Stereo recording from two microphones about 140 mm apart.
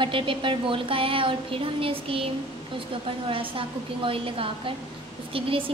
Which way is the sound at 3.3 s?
40° right (ahead or behind).